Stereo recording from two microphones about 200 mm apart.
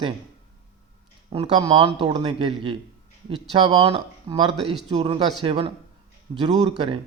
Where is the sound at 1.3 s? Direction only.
25° right (ahead or behind).